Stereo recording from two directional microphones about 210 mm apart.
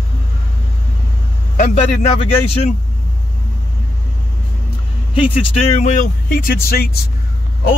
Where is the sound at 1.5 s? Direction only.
35° left (ahead or behind).